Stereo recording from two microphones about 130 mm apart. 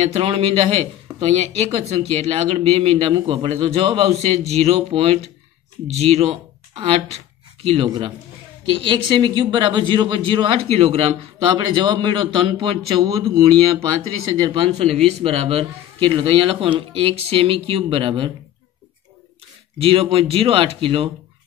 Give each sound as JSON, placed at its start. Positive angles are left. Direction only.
{"t": 0.0, "sound": "speech", "side_deg": -50}
{"t": 14.5, "sound": "speech", "side_deg": -45}
{"t": 19.8, "sound": "speech", "side_deg": -45}